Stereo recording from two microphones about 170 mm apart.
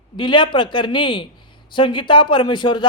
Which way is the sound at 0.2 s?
25° left (ahead or behind).